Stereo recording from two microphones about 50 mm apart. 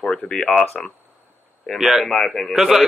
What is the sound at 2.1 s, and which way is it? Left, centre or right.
Speech, centre.